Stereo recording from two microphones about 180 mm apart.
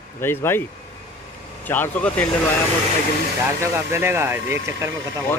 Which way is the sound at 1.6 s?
10° left (ahead or behind).